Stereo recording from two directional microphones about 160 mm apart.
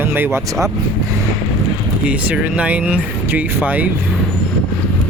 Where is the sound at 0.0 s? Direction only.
15° right (ahead or behind).